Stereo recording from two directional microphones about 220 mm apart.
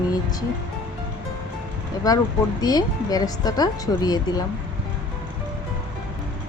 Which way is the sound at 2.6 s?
15° left (ahead or behind).